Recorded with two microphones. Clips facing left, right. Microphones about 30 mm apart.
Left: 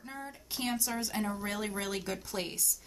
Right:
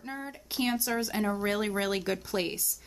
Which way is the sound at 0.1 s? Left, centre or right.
Right.